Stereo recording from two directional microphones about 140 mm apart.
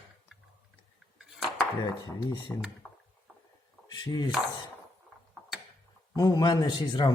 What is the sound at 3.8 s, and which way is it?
Speech, 30° left (ahead or behind).